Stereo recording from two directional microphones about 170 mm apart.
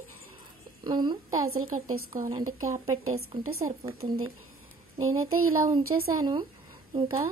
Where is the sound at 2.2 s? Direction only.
20° right (ahead or behind).